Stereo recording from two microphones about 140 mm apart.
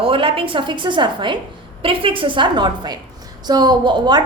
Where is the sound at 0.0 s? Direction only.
40° right (ahead or behind).